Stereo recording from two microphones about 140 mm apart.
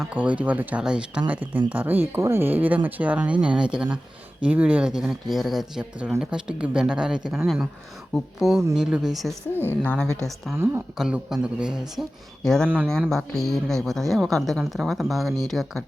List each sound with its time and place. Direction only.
0.0 s speech: 10° right (ahead or behind)
9.5 s a woman's voice: 15° left (ahead or behind)
10.5 s speech: 20° right (ahead or behind)
10.9 s speech: 5° right (ahead or behind)